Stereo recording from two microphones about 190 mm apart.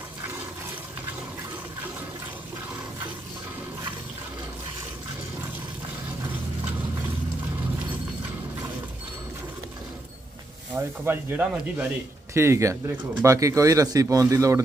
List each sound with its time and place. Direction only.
10.8 s speech: 10° right (ahead or behind)